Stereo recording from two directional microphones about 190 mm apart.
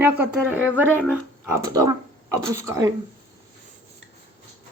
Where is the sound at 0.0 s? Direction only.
10° right (ahead or behind).